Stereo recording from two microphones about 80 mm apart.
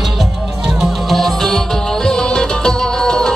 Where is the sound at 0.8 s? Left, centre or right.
Centre.